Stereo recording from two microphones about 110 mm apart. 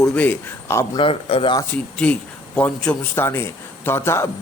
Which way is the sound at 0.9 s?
55° left (ahead or behind).